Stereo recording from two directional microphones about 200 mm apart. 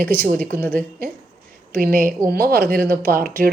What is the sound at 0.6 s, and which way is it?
Speech, 10° left (ahead or behind).